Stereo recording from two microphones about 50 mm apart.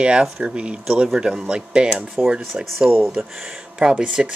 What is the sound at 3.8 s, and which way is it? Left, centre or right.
Speech, centre.